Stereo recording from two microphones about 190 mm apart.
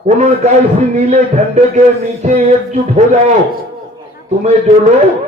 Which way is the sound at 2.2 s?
40° right (ahead or behind).